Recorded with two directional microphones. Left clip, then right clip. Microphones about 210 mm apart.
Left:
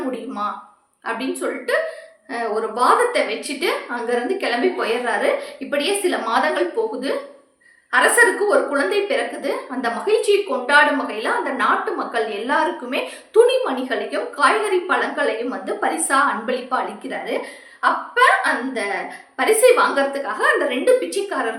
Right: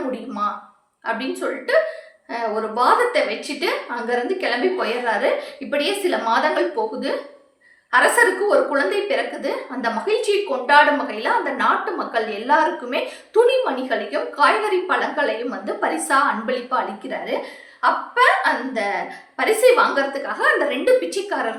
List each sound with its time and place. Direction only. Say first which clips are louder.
1.0 s a woman's voice: even; 5° left (ahead or behind)
7.9 s a woman's voice: left 1 dB; 5° left (ahead or behind)